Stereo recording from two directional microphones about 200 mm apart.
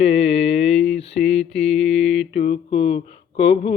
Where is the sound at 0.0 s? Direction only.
30° left (ahead or behind).